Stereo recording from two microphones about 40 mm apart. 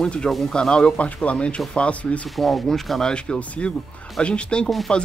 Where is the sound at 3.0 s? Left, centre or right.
Left.